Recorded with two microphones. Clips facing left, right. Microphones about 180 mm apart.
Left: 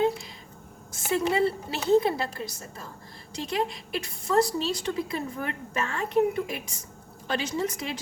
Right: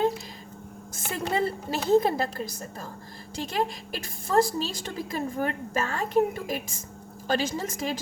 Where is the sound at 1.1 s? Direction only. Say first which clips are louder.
Left 3 dB; 45° right (ahead or behind).